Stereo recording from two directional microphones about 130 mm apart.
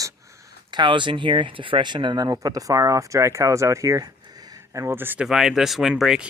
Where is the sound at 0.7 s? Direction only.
35° right (ahead or behind); by 5.3 s 15° right (ahead or behind).